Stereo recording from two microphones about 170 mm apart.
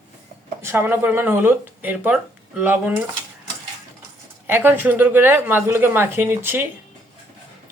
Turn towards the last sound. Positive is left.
turn(degrees=-10)  # may be behind; listen again after turning